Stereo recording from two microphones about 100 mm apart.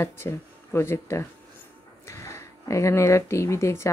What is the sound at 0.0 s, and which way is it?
Speech, 25° left (ahead or behind).